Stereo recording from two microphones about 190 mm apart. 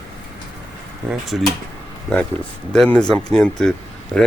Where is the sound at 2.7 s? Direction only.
5° left (ahead or behind).